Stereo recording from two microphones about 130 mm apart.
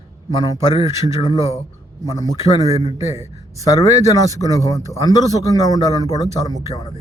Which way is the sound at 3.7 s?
25° left (ahead or behind).